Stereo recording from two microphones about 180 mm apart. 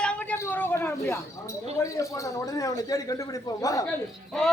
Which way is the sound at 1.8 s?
20° left (ahead or behind).